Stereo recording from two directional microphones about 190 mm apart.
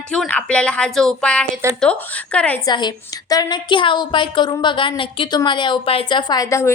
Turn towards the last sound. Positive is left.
turn(degrees=15)  # may be behind; listen again after turning